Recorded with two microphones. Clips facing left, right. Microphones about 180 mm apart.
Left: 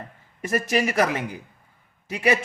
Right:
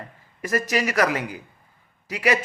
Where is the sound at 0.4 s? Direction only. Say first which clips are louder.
Left 1 dB; 25° left (ahead or behind).